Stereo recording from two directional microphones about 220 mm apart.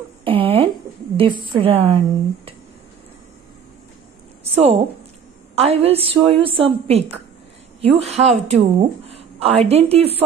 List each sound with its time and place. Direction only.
0.2 s a sound: 25° right (ahead or behind)
1.1 s a woman's voice: 20° right (ahead or behind)
4.5 s a woman's voice: 30° right (ahead or behind)